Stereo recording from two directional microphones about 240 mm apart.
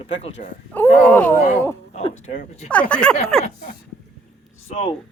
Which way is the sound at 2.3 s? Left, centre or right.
Left.